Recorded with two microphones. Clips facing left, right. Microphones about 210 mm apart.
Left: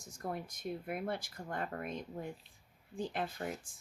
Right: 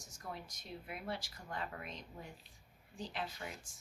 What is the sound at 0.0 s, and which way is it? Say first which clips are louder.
Speech: left 7 dB; 55° left (ahead or behind).